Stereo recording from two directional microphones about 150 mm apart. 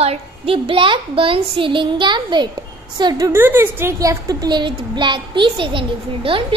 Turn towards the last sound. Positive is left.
turn(degrees=-35)  # may be behind; listen again after turning